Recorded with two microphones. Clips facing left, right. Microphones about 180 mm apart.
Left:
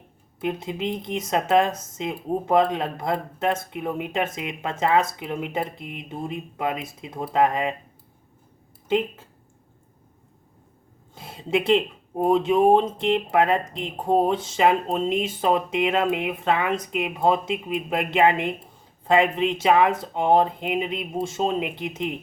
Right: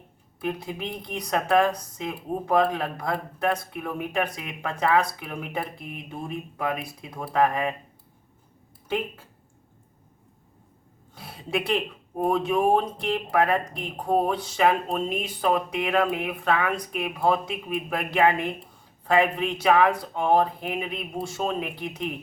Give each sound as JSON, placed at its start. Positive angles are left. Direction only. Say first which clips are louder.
{"t": 0.3, "sound": "speech", "louder": "left 3 dB", "side_deg": 20}
{"t": 8.9, "sound": "speech", "louder": "left 5 dB", "side_deg": 20}
{"t": 11.1, "sound": "speech", "louder": "left 5 dB", "side_deg": 25}